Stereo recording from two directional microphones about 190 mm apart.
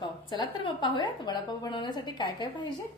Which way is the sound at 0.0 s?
25° left (ahead or behind).